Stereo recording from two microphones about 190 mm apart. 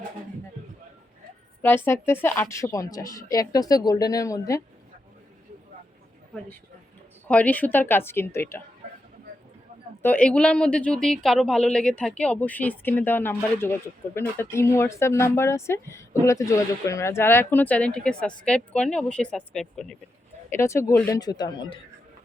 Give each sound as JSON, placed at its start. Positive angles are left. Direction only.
{"t": 1.6, "sound": "speech", "side_deg": 10}
{"t": 7.3, "sound": "speech", "side_deg": 5}
{"t": 10.0, "sound": "a woman's voice", "side_deg": 10}
{"t": 20.5, "sound": "speech", "side_deg": 15}